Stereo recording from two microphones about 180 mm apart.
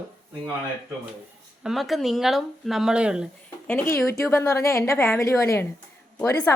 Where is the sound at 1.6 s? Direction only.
Centre (ahead or behind).